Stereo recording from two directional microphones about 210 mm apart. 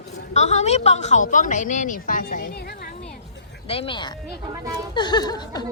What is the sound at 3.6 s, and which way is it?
Speech, 25° left (ahead or behind).